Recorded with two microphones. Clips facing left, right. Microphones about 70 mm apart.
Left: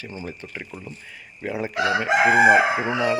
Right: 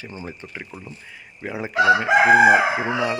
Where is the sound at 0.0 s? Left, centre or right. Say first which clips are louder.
Even; right.